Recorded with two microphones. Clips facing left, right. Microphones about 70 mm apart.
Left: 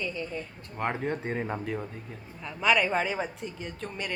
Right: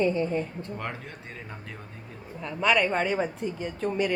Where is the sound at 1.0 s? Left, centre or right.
Left.